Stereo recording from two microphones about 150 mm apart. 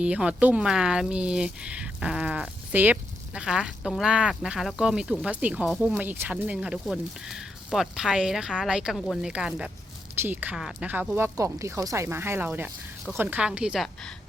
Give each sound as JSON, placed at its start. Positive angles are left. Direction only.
{"t": 0.0, "sound": "speech", "side_deg": -5}
{"t": 6.0, "sound": "speech", "side_deg": -10}